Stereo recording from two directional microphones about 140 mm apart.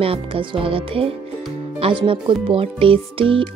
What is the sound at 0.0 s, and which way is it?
Speech, 40° right (ahead or behind).